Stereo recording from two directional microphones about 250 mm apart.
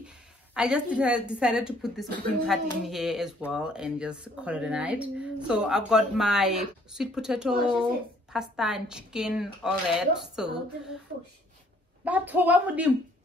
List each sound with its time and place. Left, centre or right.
0.6 s speech: centre
12.0 s a woman's voice: centre